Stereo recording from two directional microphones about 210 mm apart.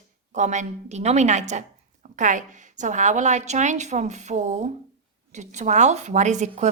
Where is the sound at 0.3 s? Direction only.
35° right (ahead or behind).